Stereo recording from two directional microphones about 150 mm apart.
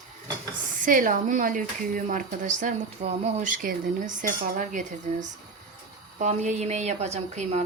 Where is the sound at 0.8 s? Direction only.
65° right (ahead or behind).